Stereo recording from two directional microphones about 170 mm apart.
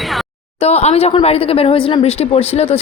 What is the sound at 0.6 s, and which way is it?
Speech, 40° left (ahead or behind).